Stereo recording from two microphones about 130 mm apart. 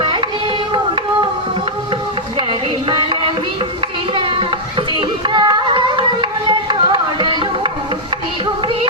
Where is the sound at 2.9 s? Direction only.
40° right (ahead or behind).